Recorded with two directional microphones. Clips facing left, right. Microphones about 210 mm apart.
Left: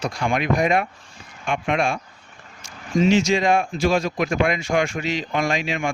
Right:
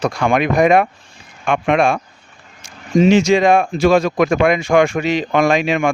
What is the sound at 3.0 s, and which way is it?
Speech, 60° right (ahead or behind).